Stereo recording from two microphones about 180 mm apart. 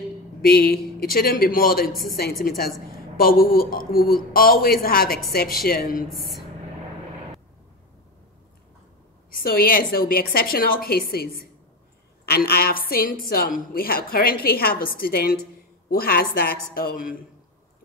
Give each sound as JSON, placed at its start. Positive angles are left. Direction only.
{"t": 0.4, "sound": "a woman's voice", "side_deg": 60}
{"t": 6.0, "sound": "speech", "side_deg": 0}
{"t": 9.3, "sound": "a woman's voice", "side_deg": 55}